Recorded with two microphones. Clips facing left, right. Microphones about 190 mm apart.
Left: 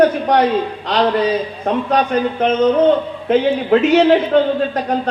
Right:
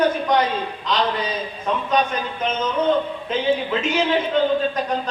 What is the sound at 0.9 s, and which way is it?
Speech, 65° left (ahead or behind).